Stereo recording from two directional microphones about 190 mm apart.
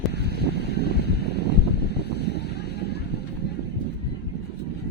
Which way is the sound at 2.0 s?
60° left (ahead or behind).